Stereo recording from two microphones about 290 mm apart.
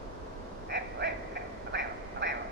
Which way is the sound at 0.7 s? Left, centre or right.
Right.